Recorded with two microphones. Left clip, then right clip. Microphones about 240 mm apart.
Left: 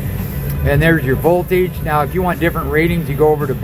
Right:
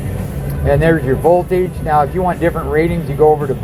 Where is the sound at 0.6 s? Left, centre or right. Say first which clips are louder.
Right 2 dB; left.